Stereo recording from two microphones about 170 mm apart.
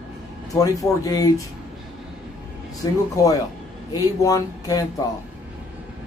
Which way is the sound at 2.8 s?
20° left (ahead or behind).